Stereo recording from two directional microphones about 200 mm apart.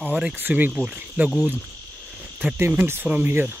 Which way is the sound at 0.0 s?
5° right (ahead or behind).